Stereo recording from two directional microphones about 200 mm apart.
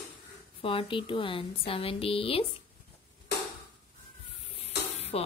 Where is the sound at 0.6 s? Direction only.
25° left (ahead or behind).